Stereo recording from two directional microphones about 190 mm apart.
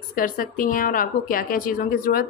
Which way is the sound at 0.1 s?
45° left (ahead or behind).